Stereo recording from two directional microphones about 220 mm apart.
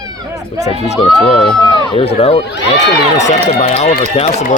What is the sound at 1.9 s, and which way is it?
Speech, 25° left (ahead or behind).